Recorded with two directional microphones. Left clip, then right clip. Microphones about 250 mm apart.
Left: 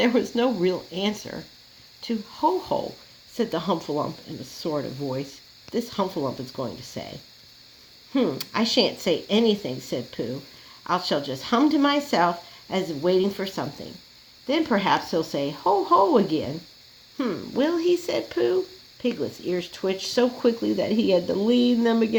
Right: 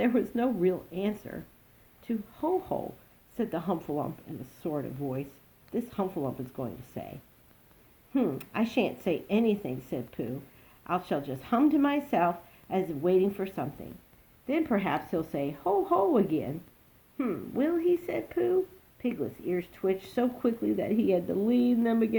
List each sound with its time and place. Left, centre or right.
0.0 s speech: left
8.1 s speech: left